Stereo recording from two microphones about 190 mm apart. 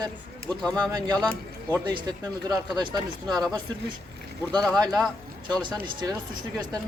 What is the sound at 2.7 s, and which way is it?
Speech, 20° right (ahead or behind).